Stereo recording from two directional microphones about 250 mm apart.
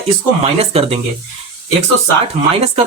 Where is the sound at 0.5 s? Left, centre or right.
Right.